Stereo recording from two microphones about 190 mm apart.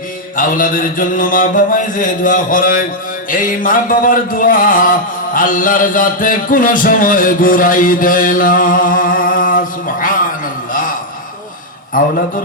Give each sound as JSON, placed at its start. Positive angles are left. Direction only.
{"t": 0.3, "sound": "music", "side_deg": 45}
{"t": 10.7, "sound": "a sound", "side_deg": 45}
{"t": 11.9, "sound": "music", "side_deg": 45}